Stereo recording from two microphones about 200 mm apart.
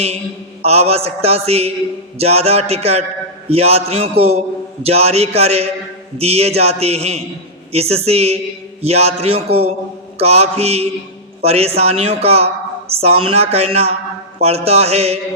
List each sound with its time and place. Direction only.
0.6 s a man's voice: 30° right (ahead or behind)